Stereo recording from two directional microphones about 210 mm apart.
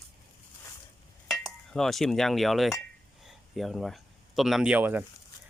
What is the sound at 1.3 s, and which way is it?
Speech, centre (ahead or behind).